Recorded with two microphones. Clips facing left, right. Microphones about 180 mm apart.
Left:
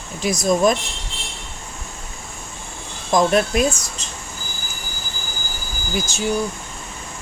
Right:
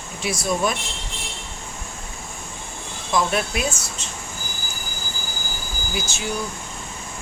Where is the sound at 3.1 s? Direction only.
45° left (ahead or behind).